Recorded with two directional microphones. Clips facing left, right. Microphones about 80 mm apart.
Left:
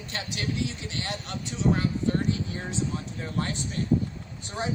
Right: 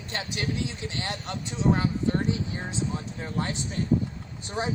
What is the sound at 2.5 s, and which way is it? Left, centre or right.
Speech, centre.